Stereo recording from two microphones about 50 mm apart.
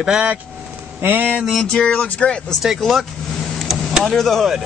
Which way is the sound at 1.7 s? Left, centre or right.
Centre.